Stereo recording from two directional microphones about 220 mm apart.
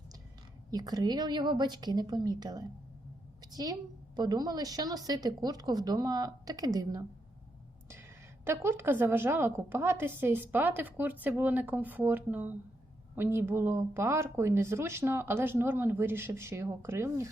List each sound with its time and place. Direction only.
0.7 s a woman's voice: 15° right (ahead or behind)
8.4 s a woman's voice: 10° right (ahead or behind)